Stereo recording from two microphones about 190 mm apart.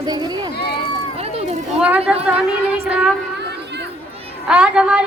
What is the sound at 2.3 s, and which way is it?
Speech, 5° right (ahead or behind).